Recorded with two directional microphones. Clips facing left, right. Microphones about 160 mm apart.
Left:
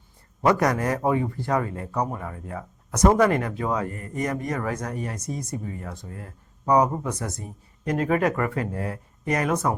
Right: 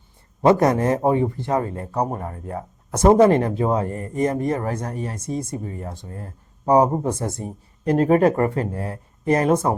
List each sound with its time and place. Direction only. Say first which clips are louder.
0.4 s a man's voice: right 5 dB; 25° right (ahead or behind)